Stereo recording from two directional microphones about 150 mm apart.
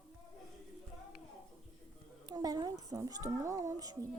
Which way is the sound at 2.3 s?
25° right (ahead or behind).